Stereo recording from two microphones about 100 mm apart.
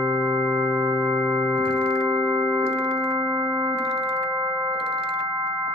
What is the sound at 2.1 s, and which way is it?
Organ, 40° right (ahead or behind).